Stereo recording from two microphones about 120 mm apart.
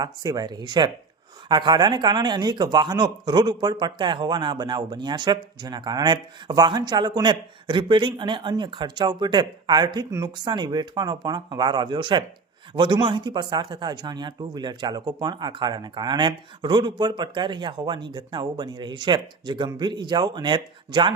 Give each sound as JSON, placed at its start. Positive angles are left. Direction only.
{"t": 0.0, "sound": "a man's voice", "side_deg": -30}